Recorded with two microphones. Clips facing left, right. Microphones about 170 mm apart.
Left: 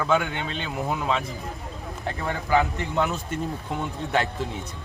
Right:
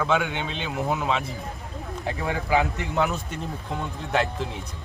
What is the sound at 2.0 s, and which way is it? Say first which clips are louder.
Speech: even; 15° right (ahead or behind).